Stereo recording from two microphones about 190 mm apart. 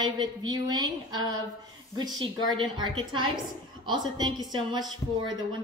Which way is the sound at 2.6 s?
25° right (ahead or behind).